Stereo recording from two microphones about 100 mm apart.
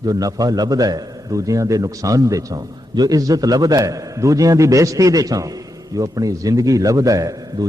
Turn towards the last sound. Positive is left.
turn(degrees=-40)  # may be behind; listen again after turning